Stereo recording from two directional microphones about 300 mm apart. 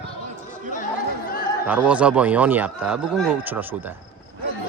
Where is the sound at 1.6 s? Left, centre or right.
Centre.